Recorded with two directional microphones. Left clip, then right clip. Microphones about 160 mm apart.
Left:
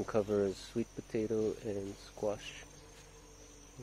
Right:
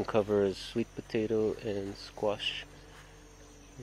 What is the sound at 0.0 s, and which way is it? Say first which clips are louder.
Speech: right 4 dB; centre (ahead or behind).